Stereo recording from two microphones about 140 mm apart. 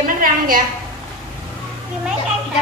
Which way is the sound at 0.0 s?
90° right.